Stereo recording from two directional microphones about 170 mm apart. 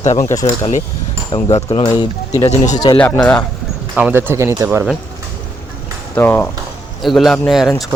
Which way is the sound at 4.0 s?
10° right (ahead or behind).